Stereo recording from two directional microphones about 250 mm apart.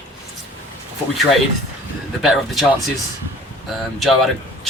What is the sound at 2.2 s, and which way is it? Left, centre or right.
Speech, centre.